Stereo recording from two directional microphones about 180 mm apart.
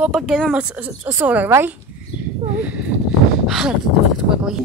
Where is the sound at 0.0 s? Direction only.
Centre (ahead or behind).